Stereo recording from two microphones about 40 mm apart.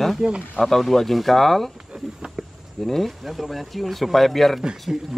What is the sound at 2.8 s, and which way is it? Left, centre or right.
Speech, centre.